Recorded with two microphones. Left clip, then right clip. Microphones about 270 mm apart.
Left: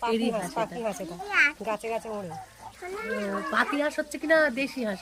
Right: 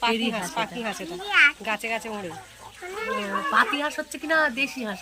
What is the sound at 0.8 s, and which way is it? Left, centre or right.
Speech, left.